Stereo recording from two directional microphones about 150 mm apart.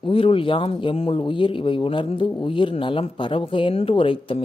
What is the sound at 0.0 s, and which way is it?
Speech, 35° left (ahead or behind).